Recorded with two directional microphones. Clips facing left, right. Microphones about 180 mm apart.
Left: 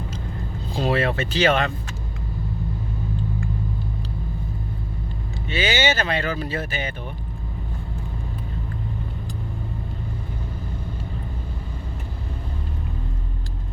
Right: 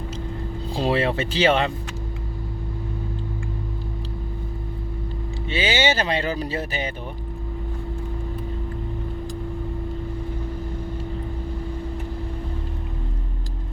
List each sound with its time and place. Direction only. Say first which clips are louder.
0.8 s speech: even; 30° right (ahead or behind)
5.5 s speech: even; 30° right (ahead or behind)